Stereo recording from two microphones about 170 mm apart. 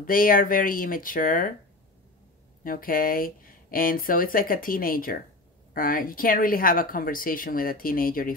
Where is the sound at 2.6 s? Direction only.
55° left (ahead or behind).